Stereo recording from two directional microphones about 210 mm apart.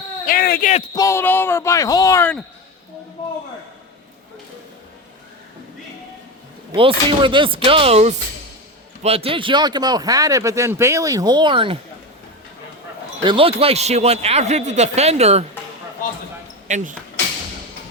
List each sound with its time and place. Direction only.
0.3 s speech: 45° left (ahead or behind)
0.9 s speech: 15° left (ahead or behind)
6.7 s speech: 25° right (ahead or behind)
13.2 s a man's voice: 25° right (ahead or behind)
16.6 s speech: 35° right (ahead or behind)